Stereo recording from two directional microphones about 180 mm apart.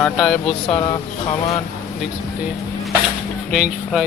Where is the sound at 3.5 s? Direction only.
Centre (ahead or behind).